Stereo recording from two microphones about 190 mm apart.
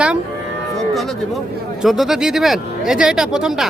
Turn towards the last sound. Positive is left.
turn(degrees=0)  # may be behind; listen again after turning